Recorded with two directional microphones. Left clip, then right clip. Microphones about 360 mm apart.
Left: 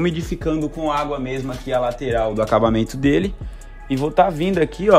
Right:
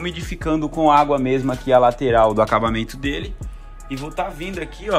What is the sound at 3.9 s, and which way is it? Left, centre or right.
Speech, left.